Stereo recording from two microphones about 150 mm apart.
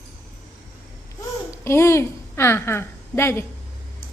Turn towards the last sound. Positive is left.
turn(degrees=15)  # may be behind; listen again after turning